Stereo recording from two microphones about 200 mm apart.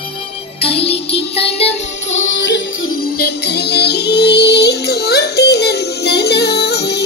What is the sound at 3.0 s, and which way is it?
Music, 55° left (ahead or behind).